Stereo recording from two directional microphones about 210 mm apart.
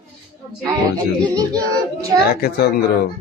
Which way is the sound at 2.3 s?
45° left (ahead or behind).